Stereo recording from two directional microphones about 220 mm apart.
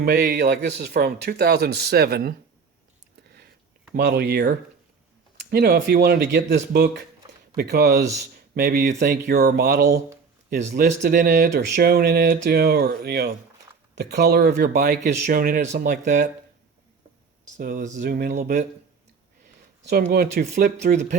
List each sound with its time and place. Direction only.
0.0 s speech: 45° right (ahead or behind)
3.9 s speech: 50° right (ahead or behind)
15.8 s speech: 45° right (ahead or behind)
17.6 s speech: 40° right (ahead or behind)
19.9 s speech: 45° right (ahead or behind)